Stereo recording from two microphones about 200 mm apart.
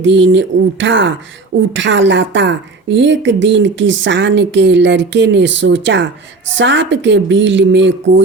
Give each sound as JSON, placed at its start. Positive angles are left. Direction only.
{"t": 0.0, "sound": "a woman's voice", "side_deg": -65}